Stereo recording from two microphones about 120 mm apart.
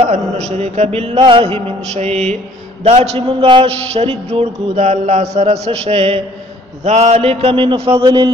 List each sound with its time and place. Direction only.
0.0 s mantra: 65° right (ahead or behind); by 3.6 s 45° right (ahead or behind)
3.6 s mantra: 55° right (ahead or behind)
6.8 s a man's voice: 65° right (ahead or behind); by 8.3 s 40° right (ahead or behind)